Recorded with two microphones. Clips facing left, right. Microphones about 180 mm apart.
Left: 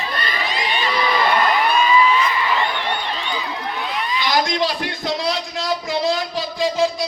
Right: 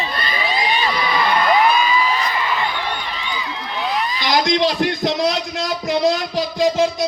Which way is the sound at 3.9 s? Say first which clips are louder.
Right 1 dB; 40° right (ahead or behind).